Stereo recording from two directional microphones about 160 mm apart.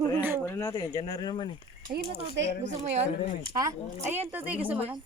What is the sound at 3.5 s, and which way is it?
A woman's voice, 20° right (ahead or behind).